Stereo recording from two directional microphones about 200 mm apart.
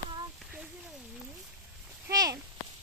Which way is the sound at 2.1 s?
20° right (ahead or behind).